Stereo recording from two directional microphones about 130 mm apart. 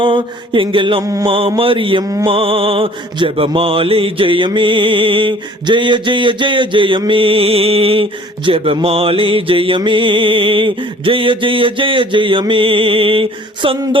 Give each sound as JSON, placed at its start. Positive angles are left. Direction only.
{"t": 0.0, "sound": "music", "side_deg": -40}
{"t": 1.0, "sound": "mantra", "side_deg": -30}
{"t": 1.3, "sound": "music", "side_deg": -45}